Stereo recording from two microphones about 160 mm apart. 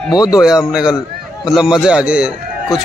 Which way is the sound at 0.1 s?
25° left (ahead or behind).